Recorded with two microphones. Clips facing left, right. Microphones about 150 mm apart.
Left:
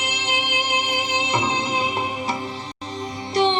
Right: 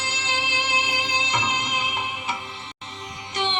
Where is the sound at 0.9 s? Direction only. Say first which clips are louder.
Left 4 dB; 30° left (ahead or behind).